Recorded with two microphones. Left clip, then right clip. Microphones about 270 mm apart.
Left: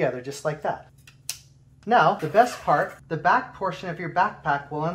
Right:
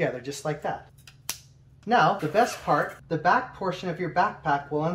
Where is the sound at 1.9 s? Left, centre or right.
Centre.